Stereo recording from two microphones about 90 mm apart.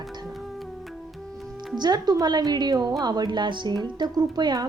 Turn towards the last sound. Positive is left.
turn(degrees=-50)  # may be behind; listen again after turning